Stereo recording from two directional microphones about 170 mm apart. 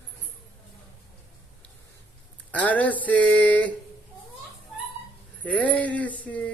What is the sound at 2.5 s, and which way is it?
Speech, 10° left (ahead or behind).